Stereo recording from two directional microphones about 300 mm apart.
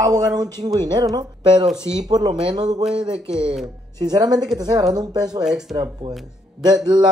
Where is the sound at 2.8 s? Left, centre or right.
Centre.